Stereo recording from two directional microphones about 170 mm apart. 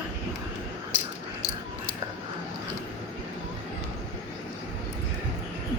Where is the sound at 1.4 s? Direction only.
20° left (ahead or behind).